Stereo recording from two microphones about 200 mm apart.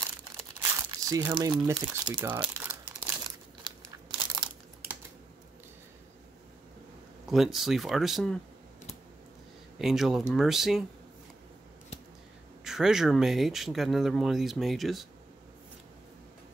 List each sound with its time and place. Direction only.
0.8 s speech: 15° right (ahead or behind)
2.5 s crumpling: 10° right (ahead or behind)
3.6 s crumpling: 20° right (ahead or behind)
7.2 s speech: centre (ahead or behind)
9.8 s speech: centre (ahead or behind)
12.6 s speech: centre (ahead or behind)